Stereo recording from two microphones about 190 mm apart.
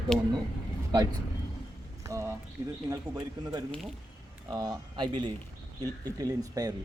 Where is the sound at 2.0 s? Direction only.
15° right (ahead or behind).